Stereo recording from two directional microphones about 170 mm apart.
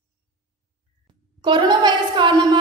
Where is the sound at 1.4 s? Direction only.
25° right (ahead or behind).